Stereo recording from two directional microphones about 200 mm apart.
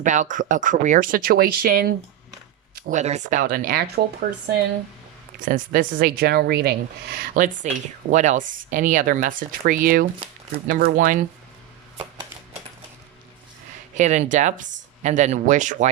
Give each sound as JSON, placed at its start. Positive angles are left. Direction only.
{"t": 0.0, "sound": "speech", "side_deg": -35}
{"t": 5.4, "sound": "speech", "side_deg": -40}
{"t": 7.3, "sound": "speech", "side_deg": -40}
{"t": 13.9, "sound": "speech", "side_deg": -35}